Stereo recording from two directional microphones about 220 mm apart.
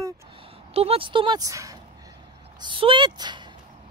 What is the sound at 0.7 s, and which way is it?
Speech, 25° right (ahead or behind).